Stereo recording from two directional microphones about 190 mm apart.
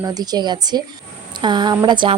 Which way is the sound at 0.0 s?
20° right (ahead or behind).